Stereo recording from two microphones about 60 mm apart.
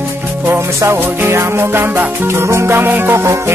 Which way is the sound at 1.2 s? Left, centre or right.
Right.